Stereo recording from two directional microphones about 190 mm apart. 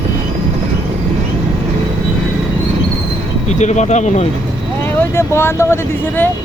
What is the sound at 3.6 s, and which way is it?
Speech, 40° left (ahead or behind).